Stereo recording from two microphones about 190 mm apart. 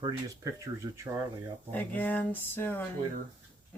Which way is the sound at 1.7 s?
10° left (ahead or behind).